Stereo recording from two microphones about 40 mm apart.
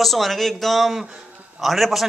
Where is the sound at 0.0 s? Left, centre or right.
Centre.